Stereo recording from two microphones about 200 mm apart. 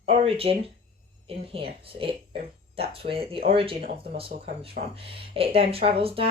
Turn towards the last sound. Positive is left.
turn(degrees=-30)  # may be behind; listen again after turning